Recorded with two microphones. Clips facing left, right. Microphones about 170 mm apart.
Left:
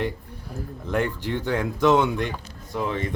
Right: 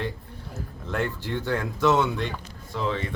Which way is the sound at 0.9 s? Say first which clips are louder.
Left 3 dB; 15° left (ahead or behind).